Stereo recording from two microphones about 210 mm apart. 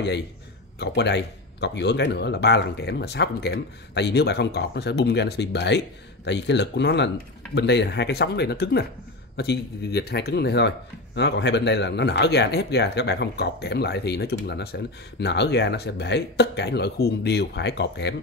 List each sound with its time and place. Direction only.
0.7 s speech: 55° left (ahead or behind)